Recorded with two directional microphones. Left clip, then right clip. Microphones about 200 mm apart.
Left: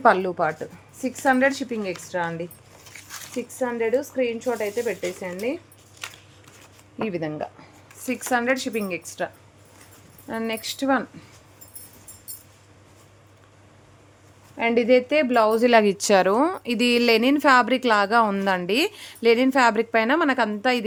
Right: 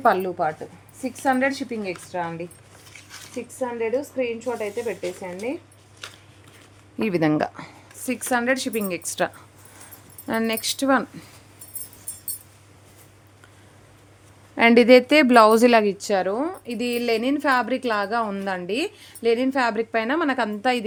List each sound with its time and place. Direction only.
0.0 s a woman's voice: 10° left (ahead or behind)
3.6 s a woman's voice: 20° left (ahead or behind)
6.0 s a sound: 40° left (ahead or behind)
7.0 s speech: 30° right (ahead or behind)
8.3 s a woman's voice: 5° right (ahead or behind)
14.5 s speech: 35° right (ahead or behind)
16.0 s a woman's voice: 20° left (ahead or behind); by 20.8 s centre (ahead or behind)